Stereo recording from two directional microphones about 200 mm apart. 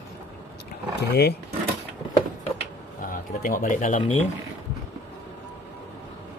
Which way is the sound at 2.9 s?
45° left (ahead or behind).